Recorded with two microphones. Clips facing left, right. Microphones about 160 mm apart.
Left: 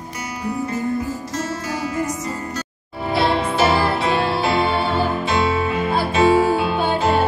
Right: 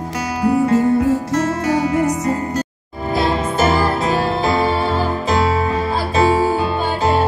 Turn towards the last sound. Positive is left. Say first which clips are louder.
# even
turn(degrees=-35)  # may be behind; listen again after turning